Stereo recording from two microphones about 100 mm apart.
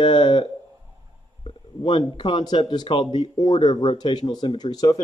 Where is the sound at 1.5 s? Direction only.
60° left (ahead or behind); by 5.0 s 40° left (ahead or behind).